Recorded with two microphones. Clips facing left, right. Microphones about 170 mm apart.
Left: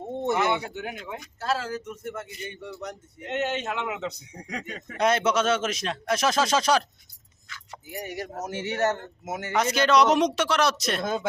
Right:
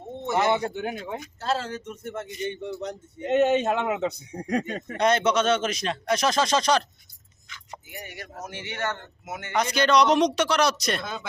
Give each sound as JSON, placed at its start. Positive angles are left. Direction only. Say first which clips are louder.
{"t": 0.3, "sound": "speech", "louder": "right 3 dB", "side_deg": -35}
{"t": 3.2, "sound": "speech", "louder": "right 8 dB", "side_deg": -55}
{"t": 4.9, "sound": "speech", "louder": "right 1 dB", "side_deg": 5}
{"t": 7.4, "sound": "keys jangling", "louder": "right 1 dB", "side_deg": -20}
{"t": 7.9, "sound": "speech", "louder": "left 8 dB", "side_deg": 40}
{"t": 9.5, "sound": "speech", "louder": "even", "side_deg": 5}
{"t": 11.0, "sound": "speech", "louder": "left 7 dB", "side_deg": 45}